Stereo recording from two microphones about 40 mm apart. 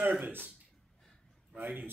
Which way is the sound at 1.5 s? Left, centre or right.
Right.